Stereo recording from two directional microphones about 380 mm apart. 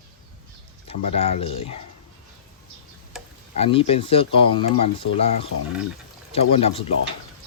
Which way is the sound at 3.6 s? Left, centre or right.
Centre.